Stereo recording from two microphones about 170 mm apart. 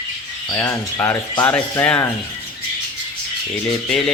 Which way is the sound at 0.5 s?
15° left (ahead or behind).